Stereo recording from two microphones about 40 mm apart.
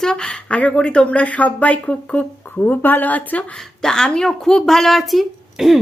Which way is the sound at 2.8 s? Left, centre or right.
Left.